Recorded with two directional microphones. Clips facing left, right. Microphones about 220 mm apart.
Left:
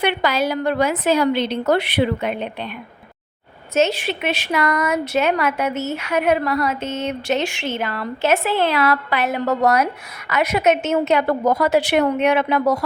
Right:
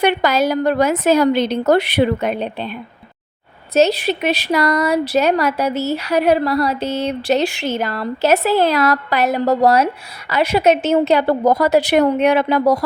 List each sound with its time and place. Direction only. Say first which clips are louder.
0.0 s speech: right 4 dB; 40° right (ahead or behind)
3.8 s speech: right 4 dB; 35° right (ahead or behind)